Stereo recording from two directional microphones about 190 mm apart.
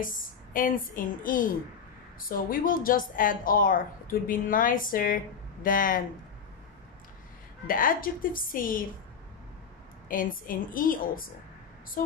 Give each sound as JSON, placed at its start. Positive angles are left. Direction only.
{"t": 0.0, "sound": "a woman's voice", "side_deg": 45}
{"t": 7.6, "sound": "a woman's voice", "side_deg": 45}
{"t": 10.0, "sound": "a woman's voice", "side_deg": 45}